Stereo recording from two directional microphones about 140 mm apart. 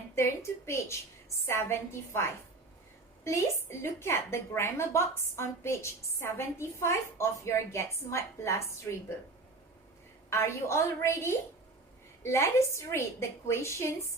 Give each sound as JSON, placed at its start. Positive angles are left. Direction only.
{"t": 0.2, "sound": "a woman's voice", "side_deg": 20}
{"t": 3.2, "sound": "a woman's voice", "side_deg": 20}
{"t": 10.2, "sound": "a woman's voice", "side_deg": 20}